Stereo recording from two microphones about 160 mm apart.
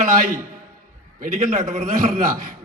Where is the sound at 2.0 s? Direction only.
55° right (ahead or behind).